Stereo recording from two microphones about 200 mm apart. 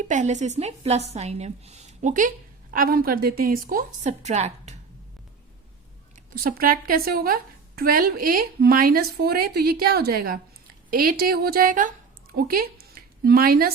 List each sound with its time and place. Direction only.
0.1 s a woman's voice: 35° right (ahead or behind)
6.3 s speech: 45° right (ahead or behind)